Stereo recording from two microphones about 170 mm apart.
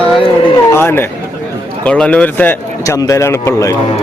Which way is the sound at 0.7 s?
15° left (ahead or behind).